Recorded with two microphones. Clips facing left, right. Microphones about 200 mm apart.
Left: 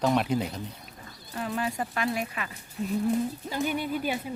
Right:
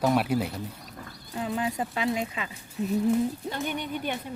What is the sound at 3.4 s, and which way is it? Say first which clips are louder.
Speech: left 2 dB; 5° left (ahead or behind).